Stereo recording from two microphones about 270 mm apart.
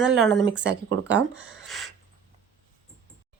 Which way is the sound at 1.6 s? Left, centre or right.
Centre.